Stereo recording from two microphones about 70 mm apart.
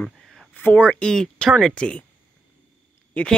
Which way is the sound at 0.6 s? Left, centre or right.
Left.